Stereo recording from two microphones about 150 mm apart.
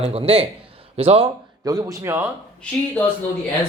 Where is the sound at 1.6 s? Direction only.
25° right (ahead or behind).